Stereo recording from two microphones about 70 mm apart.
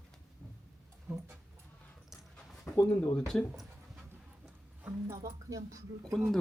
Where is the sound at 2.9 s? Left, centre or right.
Left.